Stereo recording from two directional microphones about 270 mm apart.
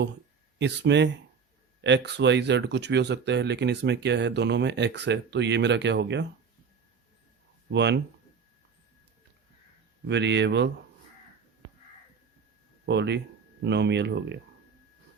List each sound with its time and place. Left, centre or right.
0.6 s speech: right
7.7 s speech: right
10.1 s speech: right
12.8 s speech: right